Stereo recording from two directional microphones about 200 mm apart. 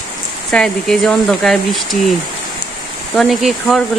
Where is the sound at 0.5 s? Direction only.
5° left (ahead or behind).